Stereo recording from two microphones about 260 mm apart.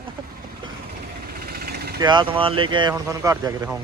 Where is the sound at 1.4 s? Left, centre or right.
Right.